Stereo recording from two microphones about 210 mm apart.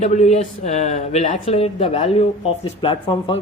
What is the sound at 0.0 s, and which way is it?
Speech, 35° left (ahead or behind).